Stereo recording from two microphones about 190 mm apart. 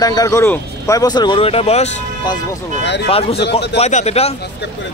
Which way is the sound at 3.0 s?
30° left (ahead or behind).